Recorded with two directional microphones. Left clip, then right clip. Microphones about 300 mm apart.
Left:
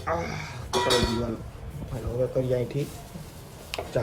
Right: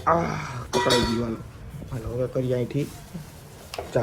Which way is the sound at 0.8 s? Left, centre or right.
Right.